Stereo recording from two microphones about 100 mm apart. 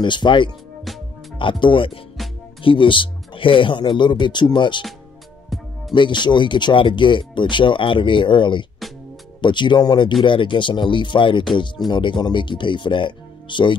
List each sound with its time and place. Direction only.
0.0 s speech: 50° left (ahead or behind)
5.5 s music: centre (ahead or behind)
5.9 s speech: 50° left (ahead or behind)